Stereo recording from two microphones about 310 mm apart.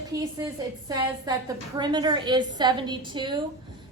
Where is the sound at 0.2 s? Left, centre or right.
Centre.